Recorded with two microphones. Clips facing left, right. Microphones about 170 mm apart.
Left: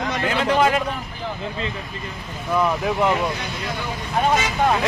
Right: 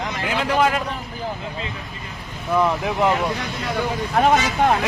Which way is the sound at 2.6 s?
20° right (ahead or behind).